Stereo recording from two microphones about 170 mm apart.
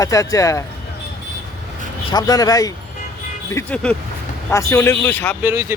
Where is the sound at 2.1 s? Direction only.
25° left (ahead or behind).